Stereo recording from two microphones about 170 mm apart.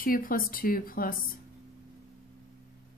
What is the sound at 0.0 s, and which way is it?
Speech, 55° left (ahead or behind).